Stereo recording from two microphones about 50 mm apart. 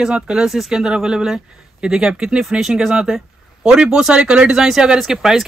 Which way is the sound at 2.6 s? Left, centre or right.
Centre.